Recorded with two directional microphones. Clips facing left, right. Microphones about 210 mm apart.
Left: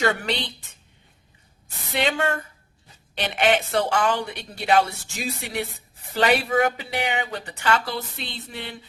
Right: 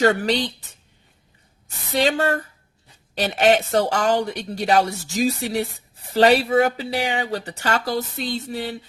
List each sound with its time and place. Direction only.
0.0 s speech: 40° right (ahead or behind)
1.9 s speech: 40° right (ahead or behind)